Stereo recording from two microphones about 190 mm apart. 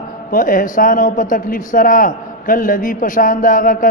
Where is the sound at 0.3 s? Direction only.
45° left (ahead or behind).